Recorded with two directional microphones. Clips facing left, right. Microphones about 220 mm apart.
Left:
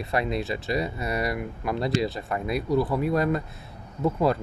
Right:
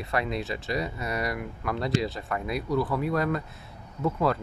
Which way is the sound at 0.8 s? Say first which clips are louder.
Left 3 dB; 30° left (ahead or behind).